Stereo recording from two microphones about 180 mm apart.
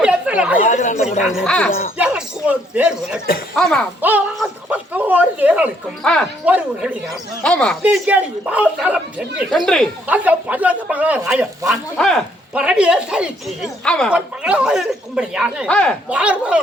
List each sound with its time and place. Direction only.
0.0 s chatter: 5° right (ahead or behind)
0.7 s speech: 40° left (ahead or behind)
1.2 s speech: 5° right (ahead or behind)
2.0 s speech: 10° right (ahead or behind)
6.0 s speech: 5° left (ahead or behind)
6.4 s speech: 10° right (ahead or behind)
7.4 s speech: 5° left (ahead or behind)
7.8 s speech: 10° right (ahead or behind)
10.1 s speech: 10° right (ahead or behind)
11.7 s speech: centre (ahead or behind)
14.1 s speech: 5° right (ahead or behind)
15.7 s speech: 5° left (ahead or behind)
16.0 s speech: 5° right (ahead or behind)